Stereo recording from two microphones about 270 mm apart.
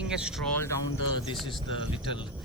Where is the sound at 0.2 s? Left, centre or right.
Centre.